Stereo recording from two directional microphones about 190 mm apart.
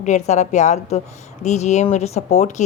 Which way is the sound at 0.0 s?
40° left (ahead or behind).